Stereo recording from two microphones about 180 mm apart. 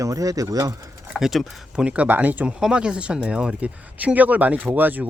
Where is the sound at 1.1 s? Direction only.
Centre (ahead or behind).